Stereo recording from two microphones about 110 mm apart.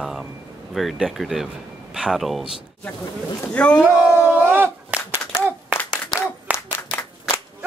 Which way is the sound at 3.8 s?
5° right (ahead or behind).